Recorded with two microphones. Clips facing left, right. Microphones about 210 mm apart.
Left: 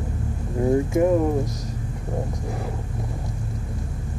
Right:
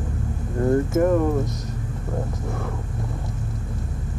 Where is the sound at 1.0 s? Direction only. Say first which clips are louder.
Left 1 dB; 15° left (ahead or behind).